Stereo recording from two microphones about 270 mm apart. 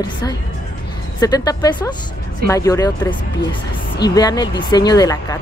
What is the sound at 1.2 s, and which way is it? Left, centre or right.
Speech, centre.